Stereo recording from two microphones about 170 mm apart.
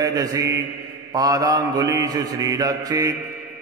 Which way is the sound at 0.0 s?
20° right (ahead or behind).